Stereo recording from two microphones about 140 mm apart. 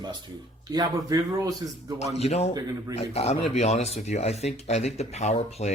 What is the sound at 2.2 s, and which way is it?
Speech, 50° left (ahead or behind).